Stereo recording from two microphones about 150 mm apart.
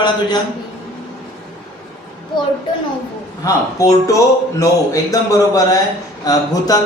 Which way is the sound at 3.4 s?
20° left (ahead or behind).